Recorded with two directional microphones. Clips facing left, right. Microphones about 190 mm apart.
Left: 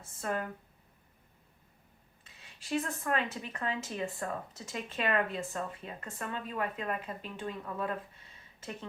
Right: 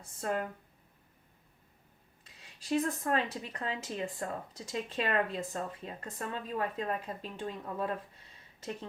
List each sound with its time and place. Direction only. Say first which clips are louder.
0.0 s speech: right 1 dB; 35° right (ahead or behind)
2.2 s speech: right 7 dB; 35° right (ahead or behind)
4.0 s speech: left 1 dB; 15° right (ahead or behind)
4.7 s speech: even; 35° right (ahead or behind)